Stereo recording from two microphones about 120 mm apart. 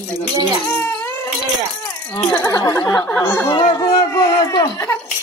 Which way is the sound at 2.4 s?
30° left (ahead or behind).